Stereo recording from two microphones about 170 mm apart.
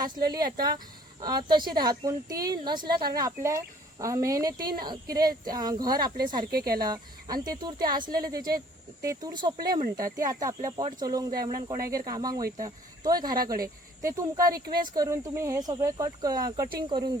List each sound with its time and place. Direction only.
0.2 s speech: 65° right (ahead or behind)
0.4 s speech: 25° right (ahead or behind)
4.5 s speech: 60° right (ahead or behind)
5.1 s speech: 25° right (ahead or behind)
6.5 s speech: 65° right (ahead or behind)
6.7 s speech: 25° right (ahead or behind)
12.4 s speech: 60° right (ahead or behind)
12.6 s speech: 20° right (ahead or behind)
13.4 s speech: 60° right (ahead or behind)
14.0 s speech: 20° right (ahead or behind)
14.5 s speech: 60° right (ahead or behind)
14.9 s speech: 20° right (ahead or behind)